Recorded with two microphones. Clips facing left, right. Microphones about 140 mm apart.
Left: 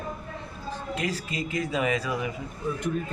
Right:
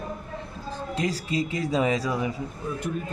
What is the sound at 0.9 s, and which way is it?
Speech, 35° right (ahead or behind).